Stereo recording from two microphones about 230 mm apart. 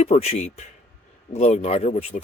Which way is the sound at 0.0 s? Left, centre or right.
Left.